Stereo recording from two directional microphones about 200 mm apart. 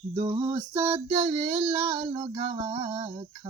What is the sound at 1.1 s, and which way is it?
Child singing, 40° right (ahead or behind).